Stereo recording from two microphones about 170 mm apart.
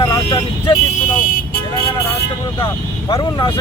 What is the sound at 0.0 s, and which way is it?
Vehicle, 20° left (ahead or behind).